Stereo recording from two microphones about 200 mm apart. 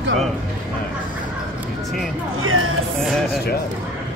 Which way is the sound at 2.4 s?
90° right.